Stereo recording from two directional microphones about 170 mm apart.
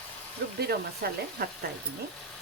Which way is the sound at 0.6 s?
65° right (ahead or behind).